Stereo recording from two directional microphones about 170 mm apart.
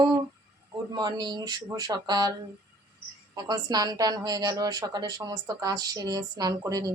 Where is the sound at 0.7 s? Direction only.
25° right (ahead or behind).